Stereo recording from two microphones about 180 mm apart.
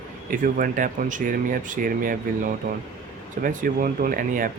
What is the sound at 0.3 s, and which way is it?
Speech, 50° right (ahead or behind).